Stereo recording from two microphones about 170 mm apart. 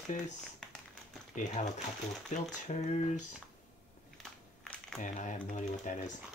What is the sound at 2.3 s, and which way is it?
Speech, 45° left (ahead or behind).